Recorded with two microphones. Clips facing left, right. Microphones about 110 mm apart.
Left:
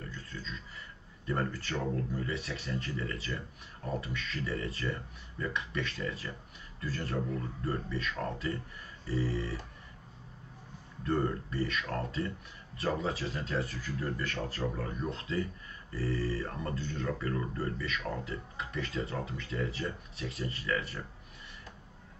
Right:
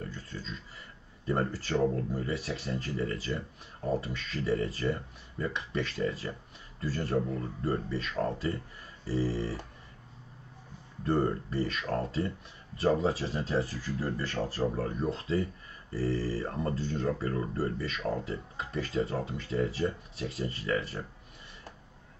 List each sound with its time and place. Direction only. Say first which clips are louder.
0.1 s a sound: right 2 dB; 30° right (ahead or behind)
1.2 s speech: right 3 dB; 30° right (ahead or behind)
11.1 s speech: right 3 dB; 30° right (ahead or behind)